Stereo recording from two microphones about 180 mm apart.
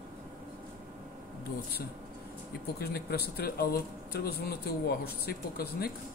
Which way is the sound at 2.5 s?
60° left (ahead or behind).